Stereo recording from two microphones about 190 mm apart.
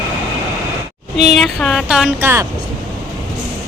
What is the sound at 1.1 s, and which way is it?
Speech, 35° right (ahead or behind).